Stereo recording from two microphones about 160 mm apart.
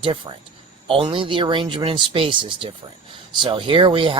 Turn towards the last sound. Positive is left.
turn(degrees=-35)  # may be behind; listen again after turning